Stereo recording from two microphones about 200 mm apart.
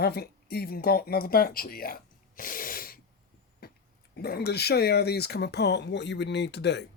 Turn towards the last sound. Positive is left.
turn(degrees=60)  # may be behind; listen again after turning